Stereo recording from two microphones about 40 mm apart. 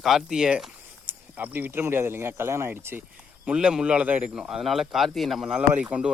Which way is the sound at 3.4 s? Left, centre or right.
Right.